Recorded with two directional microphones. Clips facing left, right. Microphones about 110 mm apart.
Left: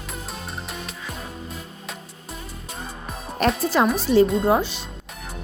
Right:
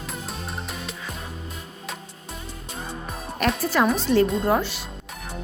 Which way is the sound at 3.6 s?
20° left (ahead or behind).